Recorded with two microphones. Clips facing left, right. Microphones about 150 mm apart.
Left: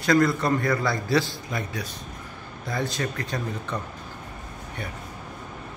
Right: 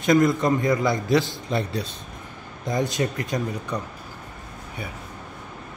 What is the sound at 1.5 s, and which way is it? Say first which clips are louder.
Speech: right 6 dB; 30° right (ahead or behind).